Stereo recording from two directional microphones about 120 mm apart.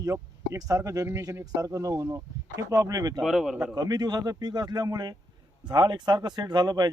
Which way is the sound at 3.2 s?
Centre (ahead or behind).